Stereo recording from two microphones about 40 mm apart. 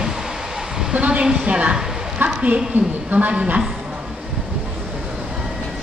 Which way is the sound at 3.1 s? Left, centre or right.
Right.